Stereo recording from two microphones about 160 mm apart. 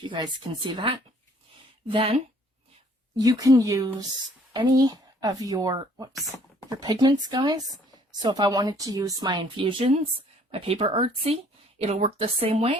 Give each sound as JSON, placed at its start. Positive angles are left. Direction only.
{"t": 0.0, "sound": "a woman's voice", "side_deg": -30}
{"t": 3.2, "sound": "a woman's voice", "side_deg": -20}